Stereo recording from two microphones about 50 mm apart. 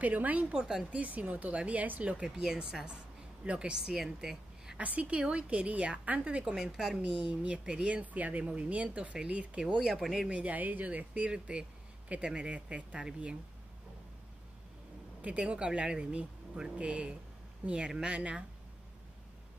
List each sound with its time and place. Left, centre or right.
0.0 s speech: right
0.6 s speech: centre
0.8 s speech: right
2.3 s speech: centre
3.4 s speech: right
3.7 s a woman's voice: centre
4.7 s speech: right
6.5 s speech: centre
7.0 s speech: centre
8.0 s speech: right
9.8 s speech: centre
10.2 s speech: right
15.2 s speech: right